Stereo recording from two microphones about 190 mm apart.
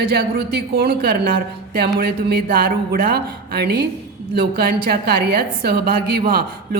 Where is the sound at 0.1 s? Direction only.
55° right (ahead or behind).